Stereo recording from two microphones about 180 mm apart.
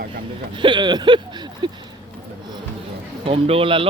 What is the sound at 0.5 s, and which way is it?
Speech, 25° right (ahead or behind).